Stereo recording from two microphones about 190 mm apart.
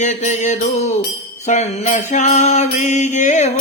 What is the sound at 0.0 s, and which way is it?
Mantra, 40° left (ahead or behind).